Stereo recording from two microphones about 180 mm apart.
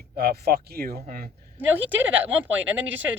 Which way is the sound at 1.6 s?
10° right (ahead or behind).